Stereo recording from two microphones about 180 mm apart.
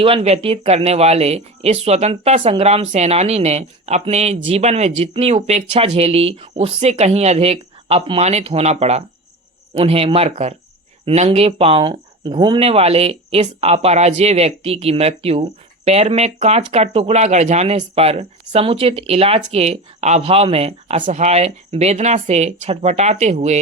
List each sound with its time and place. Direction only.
0.0 s speech: 30° right (ahead or behind)